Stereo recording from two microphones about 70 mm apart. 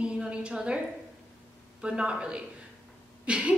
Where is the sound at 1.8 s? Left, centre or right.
Centre.